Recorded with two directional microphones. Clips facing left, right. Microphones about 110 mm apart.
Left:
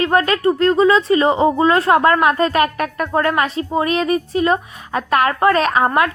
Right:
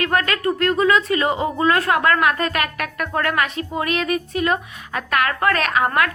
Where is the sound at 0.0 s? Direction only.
30° left (ahead or behind).